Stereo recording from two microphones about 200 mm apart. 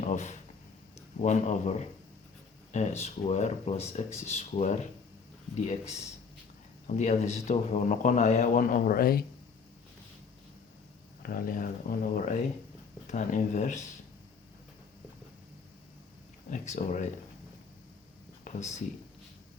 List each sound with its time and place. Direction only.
0.0 s speech: 35° left (ahead or behind)
6.8 s speech: 35° left (ahead or behind)
11.2 s speech: 45° left (ahead or behind)
16.5 s speech: 40° left (ahead or behind)
18.5 s a sound: 40° left (ahead or behind)